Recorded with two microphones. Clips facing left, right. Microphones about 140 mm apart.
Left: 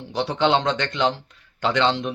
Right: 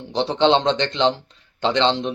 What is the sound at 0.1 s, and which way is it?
A man's voice, 25° right (ahead or behind).